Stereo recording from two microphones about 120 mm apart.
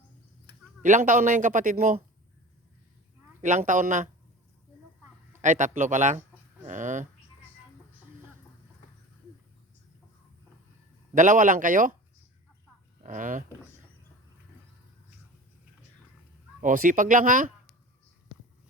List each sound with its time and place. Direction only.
0.8 s a man's voice: 90° right
3.4 s a man's voice: 90° right
5.4 s a man's voice: 90° right
11.1 s a man's voice: 90° right
13.0 s speech: 90° right
16.6 s a man's voice: 90° right